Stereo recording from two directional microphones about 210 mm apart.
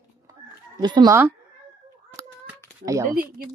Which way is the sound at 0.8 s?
20° right (ahead or behind).